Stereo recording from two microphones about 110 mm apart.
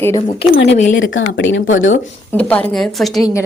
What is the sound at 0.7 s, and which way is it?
Speech, 90° left.